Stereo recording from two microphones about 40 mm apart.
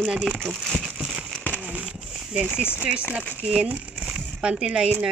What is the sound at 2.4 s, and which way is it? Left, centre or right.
Speech, right.